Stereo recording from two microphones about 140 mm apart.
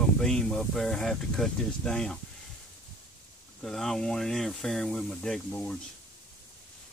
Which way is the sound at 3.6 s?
5° left (ahead or behind).